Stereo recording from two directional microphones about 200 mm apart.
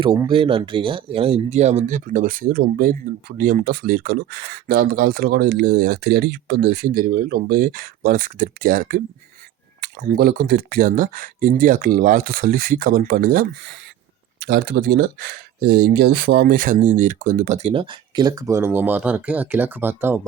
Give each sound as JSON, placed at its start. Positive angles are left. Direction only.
{"t": 0.0, "sound": "speech", "side_deg": -20}
{"t": 17.7, "sound": "speech", "side_deg": -25}